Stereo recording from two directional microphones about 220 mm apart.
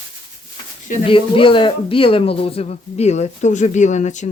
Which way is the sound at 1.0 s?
25° left (ahead or behind).